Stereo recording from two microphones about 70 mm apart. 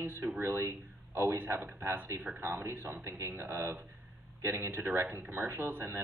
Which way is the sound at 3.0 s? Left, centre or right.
Right.